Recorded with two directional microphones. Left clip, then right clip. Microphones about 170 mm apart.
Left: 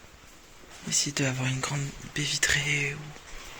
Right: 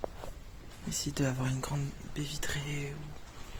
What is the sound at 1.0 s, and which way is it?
Speech, 35° right (ahead or behind).